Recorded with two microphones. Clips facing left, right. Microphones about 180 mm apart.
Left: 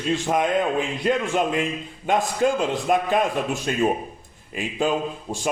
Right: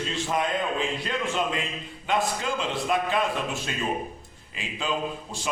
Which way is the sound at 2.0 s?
50° left (ahead or behind).